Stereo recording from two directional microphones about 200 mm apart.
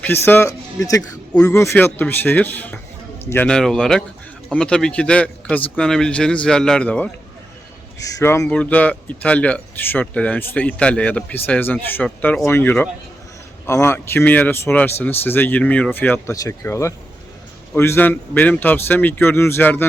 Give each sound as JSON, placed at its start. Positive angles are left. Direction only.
{"t": 0.0, "sound": "speech", "side_deg": 10}
{"t": 7.9, "sound": "speech", "side_deg": 15}